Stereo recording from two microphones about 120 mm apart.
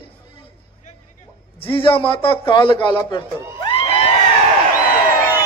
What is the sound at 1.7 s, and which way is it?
Speech, 45° left (ahead or behind).